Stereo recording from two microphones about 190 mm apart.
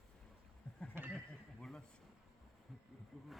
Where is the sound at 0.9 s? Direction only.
10° right (ahead or behind).